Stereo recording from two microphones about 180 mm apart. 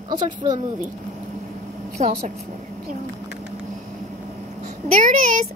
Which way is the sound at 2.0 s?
40° right (ahead or behind).